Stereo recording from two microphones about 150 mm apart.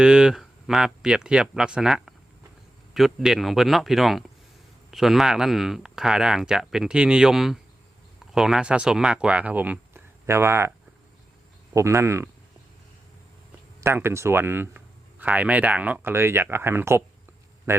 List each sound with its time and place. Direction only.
0.0 s speech: 5° right (ahead or behind)
13.8 s a man's voice: 15° right (ahead or behind)